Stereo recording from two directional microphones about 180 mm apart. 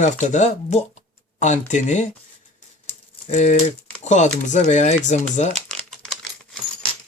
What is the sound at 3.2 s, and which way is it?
Speech, 40° left (ahead or behind).